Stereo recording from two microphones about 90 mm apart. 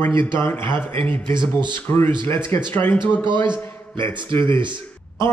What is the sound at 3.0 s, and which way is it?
Speech, 60° right (ahead or behind).